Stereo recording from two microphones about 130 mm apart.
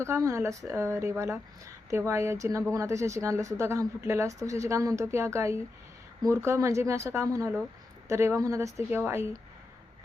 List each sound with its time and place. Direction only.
0.3 s speech: 20° right (ahead or behind)